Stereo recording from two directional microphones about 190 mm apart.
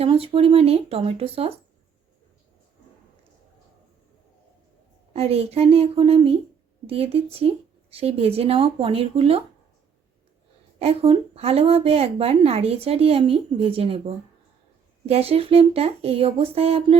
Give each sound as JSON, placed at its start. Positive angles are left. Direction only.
{"t": 0.0, "sound": "a woman's voice", "side_deg": -30}
{"t": 5.1, "sound": "a woman's voice", "side_deg": -30}
{"t": 10.8, "sound": "a woman's voice", "side_deg": -30}
{"t": 15.0, "sound": "a woman's voice", "side_deg": -30}